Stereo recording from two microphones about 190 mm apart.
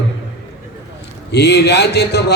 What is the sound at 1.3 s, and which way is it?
A man's voice, 60° left (ahead or behind).